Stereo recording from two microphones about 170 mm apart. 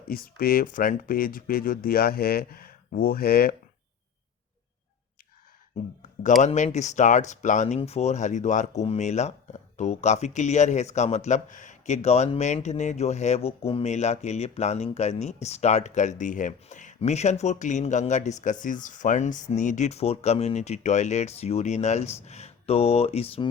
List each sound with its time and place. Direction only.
0.1 s speech: 60° left (ahead or behind)
6.4 s speech: 40° left (ahead or behind)